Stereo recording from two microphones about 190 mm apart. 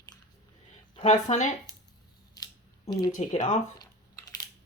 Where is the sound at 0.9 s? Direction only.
35° left (ahead or behind).